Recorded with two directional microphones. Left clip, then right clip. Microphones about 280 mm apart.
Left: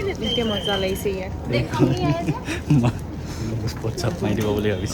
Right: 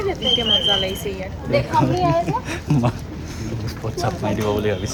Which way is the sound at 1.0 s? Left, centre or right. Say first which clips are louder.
Left 1 dB; centre.